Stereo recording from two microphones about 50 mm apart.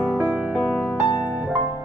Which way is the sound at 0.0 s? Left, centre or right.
Right.